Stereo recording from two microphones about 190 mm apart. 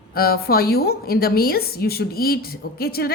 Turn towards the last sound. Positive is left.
turn(degrees=55)  # may be behind; listen again after turning